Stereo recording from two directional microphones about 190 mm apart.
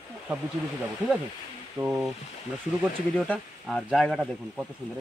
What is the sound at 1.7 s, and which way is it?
Speech, 5° right (ahead or behind).